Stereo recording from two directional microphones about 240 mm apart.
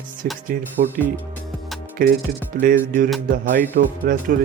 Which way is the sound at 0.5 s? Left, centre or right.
Right.